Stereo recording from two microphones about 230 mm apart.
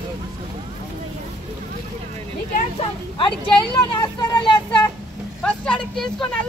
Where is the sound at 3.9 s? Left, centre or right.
Centre.